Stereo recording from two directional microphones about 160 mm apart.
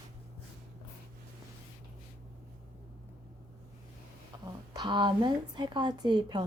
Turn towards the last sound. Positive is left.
turn(degrees=-25)  # may be behind; listen again after turning